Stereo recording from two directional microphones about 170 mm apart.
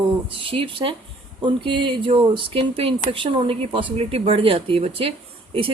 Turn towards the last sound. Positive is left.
turn(degrees=-30)  # may be behind; listen again after turning